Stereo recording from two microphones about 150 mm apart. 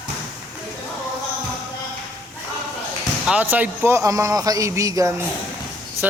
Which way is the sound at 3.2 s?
10° right (ahead or behind).